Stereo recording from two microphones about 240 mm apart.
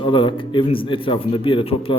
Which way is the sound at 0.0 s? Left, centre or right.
Left.